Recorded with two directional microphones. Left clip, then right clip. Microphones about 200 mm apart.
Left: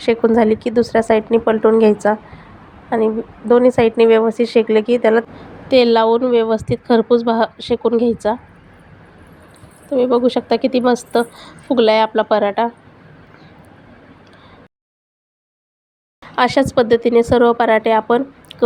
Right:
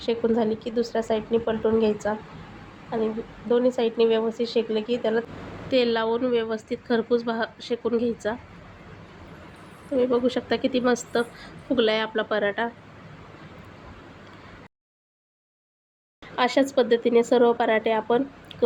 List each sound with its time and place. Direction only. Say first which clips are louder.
0.0 s a woman's voice: left 10 dB; 40° left (ahead or behind)
9.9 s a woman's voice: left 8 dB; 25° left (ahead or behind)
16.3 s a woman's voice: left 7 dB; 30° left (ahead or behind)